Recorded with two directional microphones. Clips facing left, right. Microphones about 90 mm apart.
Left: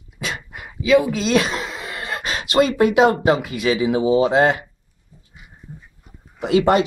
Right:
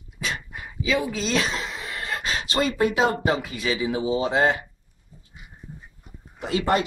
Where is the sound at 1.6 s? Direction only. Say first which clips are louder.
Left 3 dB; 20° left (ahead or behind).